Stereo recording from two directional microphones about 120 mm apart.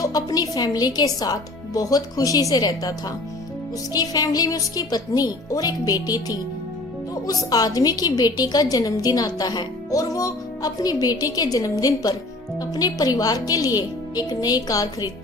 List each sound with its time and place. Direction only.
0.0 s a woman's voice: 35° left (ahead or behind)
3.9 s a woman's voice: 35° left (ahead or behind)